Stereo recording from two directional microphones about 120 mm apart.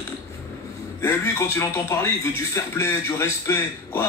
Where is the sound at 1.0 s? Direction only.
20° left (ahead or behind).